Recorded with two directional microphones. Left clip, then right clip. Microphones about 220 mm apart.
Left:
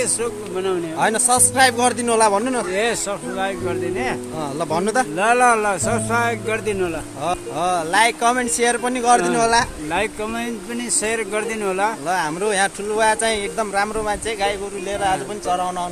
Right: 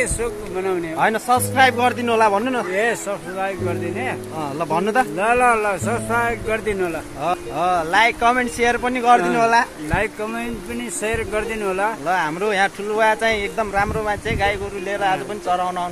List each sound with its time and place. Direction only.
0.0 s speech: 10° left (ahead or behind)
0.9 s speech: centre (ahead or behind)
2.7 s speech: 15° left (ahead or behind)
4.6 s speech: centre (ahead or behind)
5.1 s speech: 20° left (ahead or behind)
7.2 s speech: 5° right (ahead or behind)
11.1 s speech: 15° left (ahead or behind)
12.1 s speech: 5° right (ahead or behind)